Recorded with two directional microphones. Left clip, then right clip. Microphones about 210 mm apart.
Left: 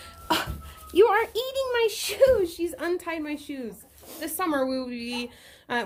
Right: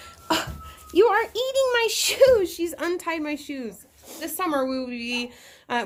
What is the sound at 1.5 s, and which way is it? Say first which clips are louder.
A woman's voice: right 4 dB; 45° right (ahead or behind).